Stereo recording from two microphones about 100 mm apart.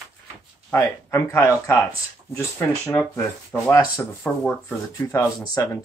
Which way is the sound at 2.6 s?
20° left (ahead or behind).